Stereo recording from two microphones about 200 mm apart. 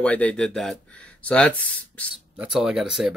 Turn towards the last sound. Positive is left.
turn(degrees=0)  # may be behind; listen again after turning